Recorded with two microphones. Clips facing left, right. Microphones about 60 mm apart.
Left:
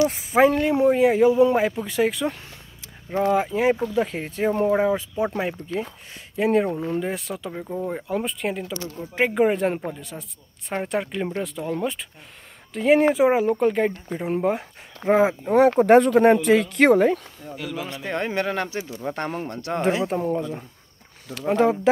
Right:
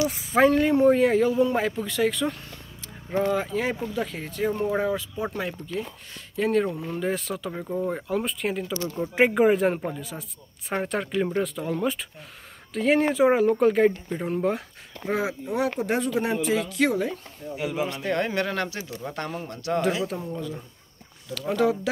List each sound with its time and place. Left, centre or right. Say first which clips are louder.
0.4 s a man's voice: left 1 dB; centre
3.2 s speech: left 4 dB; centre
6.3 s a man's voice: left 3 dB; centre
7.0 s speech: even; centre
8.9 s speech: right 5 dB; right
9.2 s speech: right 1 dB; centre
15.0 s speech: left 8 dB; left
17.6 s speech: right 3 dB; centre
18.0 s a man's voice: left 3 dB; centre
19.1 s speech: left 4 dB; left